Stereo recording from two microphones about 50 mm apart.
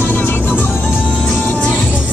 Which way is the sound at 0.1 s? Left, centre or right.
Left.